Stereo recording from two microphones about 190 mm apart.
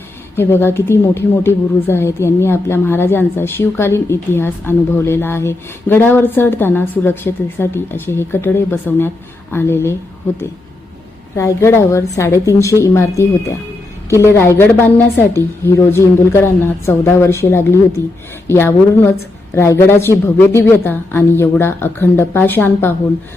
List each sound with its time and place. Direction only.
0.3 s speech: 10° left (ahead or behind)
11.3 s speech: 15° left (ahead or behind)